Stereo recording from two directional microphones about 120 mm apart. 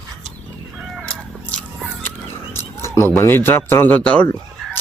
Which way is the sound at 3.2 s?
20° left (ahead or behind).